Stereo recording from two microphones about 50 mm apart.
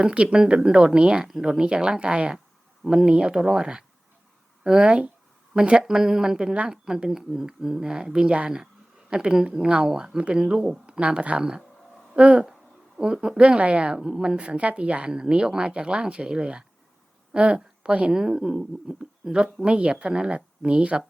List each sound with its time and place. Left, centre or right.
0.0 s a woman's voice: centre